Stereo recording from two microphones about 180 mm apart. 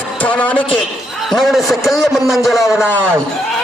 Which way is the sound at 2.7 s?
15° left (ahead or behind).